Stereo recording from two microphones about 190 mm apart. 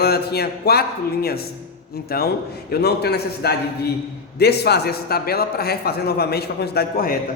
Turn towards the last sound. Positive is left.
turn(degrees=55)  # may be behind; listen again after turning